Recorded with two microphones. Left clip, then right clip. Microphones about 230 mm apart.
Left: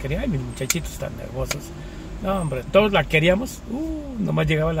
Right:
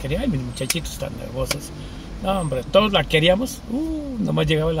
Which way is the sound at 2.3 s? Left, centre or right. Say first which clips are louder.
Right 2 dB; centre.